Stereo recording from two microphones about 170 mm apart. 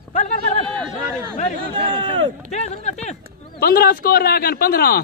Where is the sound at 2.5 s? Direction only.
40° left (ahead or behind).